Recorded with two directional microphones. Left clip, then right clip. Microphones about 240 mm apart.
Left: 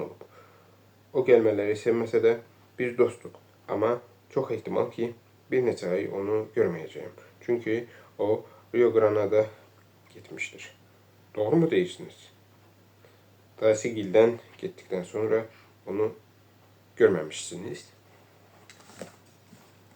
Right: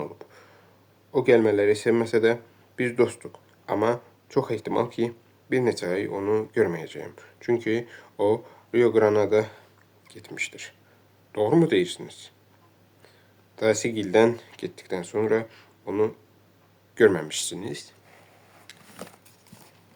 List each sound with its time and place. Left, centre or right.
0.2 s a sound: right
1.1 s speech: right
13.6 s speech: right